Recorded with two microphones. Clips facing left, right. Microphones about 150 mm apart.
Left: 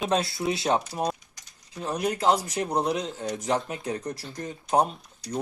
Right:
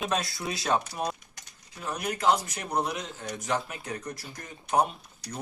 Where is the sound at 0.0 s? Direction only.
30° left (ahead or behind).